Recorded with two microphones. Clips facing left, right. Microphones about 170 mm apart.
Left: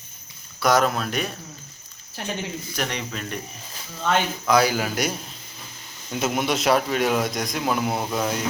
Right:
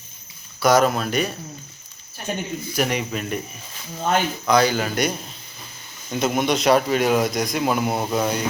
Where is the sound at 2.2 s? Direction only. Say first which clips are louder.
Right 2 dB; 90° left.